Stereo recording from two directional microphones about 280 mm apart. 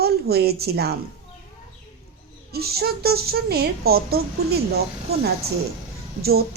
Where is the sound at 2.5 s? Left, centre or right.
Right.